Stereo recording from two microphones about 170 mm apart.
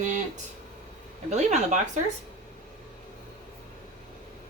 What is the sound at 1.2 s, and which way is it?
Speech, 45° right (ahead or behind).